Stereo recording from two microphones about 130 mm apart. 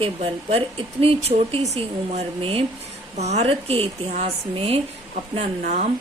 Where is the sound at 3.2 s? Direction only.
55° right (ahead or behind).